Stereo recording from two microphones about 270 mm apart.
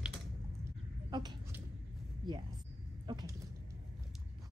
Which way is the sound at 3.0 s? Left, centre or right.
Centre.